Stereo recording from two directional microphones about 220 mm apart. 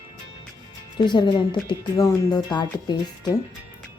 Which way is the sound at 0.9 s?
20° left (ahead or behind).